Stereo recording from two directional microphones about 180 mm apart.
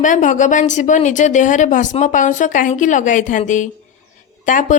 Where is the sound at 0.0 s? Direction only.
45° left (ahead or behind).